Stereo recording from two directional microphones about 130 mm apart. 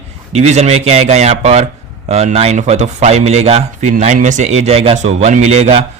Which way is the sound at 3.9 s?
70° right (ahead or behind).